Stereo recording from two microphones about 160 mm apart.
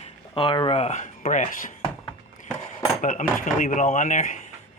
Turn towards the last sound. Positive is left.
turn(degrees=55)  # may be behind; listen again after turning